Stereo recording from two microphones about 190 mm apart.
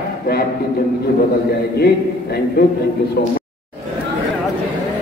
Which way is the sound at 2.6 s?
55° left (ahead or behind).